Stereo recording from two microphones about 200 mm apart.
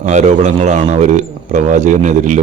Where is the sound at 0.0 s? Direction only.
35° right (ahead or behind).